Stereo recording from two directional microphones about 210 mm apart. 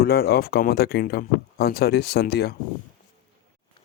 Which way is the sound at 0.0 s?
50° left (ahead or behind).